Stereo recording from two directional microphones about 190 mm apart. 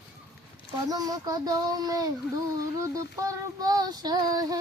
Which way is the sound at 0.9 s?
20° right (ahead or behind).